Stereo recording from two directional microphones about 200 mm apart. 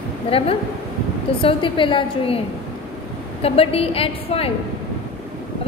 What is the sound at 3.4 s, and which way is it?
A woman's voice, 30° left (ahead or behind).